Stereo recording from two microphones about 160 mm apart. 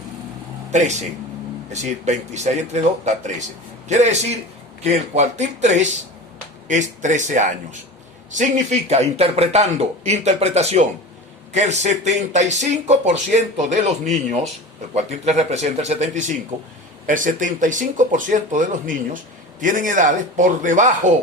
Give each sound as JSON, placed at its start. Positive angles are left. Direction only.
{"t": 0.7, "sound": "speech", "side_deg": -45}
{"t": 14.9, "sound": "speech", "side_deg": -45}